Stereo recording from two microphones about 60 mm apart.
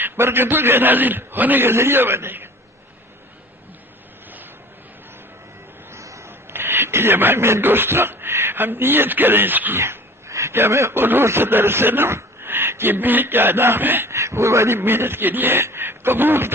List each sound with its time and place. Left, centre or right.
0.0 s a man's voice: right
5.9 s a sound: right
6.5 s speech: right
9.8 s dog: right
10.5 s a man's voice: right
11.0 s a man's voice: right